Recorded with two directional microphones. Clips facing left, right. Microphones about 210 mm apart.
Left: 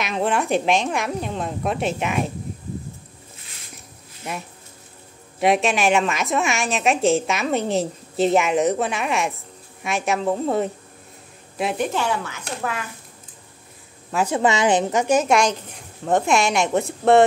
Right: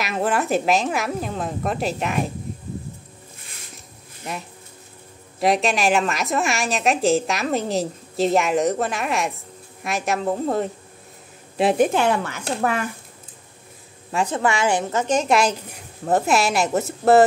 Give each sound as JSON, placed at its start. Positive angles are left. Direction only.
{"t": 0.0, "sound": "a woman's voice", "side_deg": -5}
{"t": 5.4, "sound": "a woman's voice", "side_deg": 0}
{"t": 11.8, "sound": "speech", "side_deg": -55}
{"t": 14.1, "sound": "a woman's voice", "side_deg": 10}
{"t": 14.4, "sound": "a woman's voice", "side_deg": 20}